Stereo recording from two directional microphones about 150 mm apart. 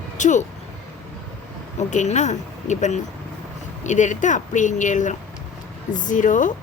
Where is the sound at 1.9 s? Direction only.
50° left (ahead or behind).